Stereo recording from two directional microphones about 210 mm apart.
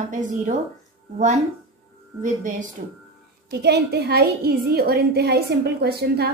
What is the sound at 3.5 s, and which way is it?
A woman's voice, 50° right (ahead or behind).